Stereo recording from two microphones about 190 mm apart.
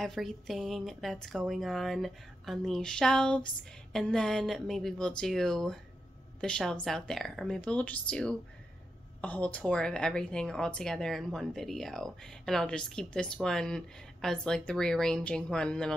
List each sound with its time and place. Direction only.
0.0 s speech: centre (ahead or behind)